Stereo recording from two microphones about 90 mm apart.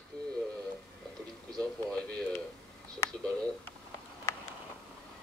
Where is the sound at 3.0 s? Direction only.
30° left (ahead or behind).